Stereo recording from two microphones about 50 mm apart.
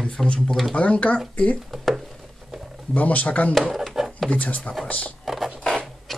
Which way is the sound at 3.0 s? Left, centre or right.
Left.